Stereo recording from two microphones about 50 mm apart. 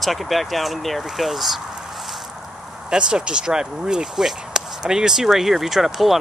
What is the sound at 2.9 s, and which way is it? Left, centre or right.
Speech, centre.